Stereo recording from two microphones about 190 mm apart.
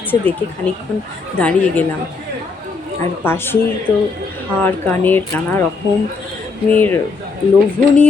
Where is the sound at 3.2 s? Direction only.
10° left (ahead or behind).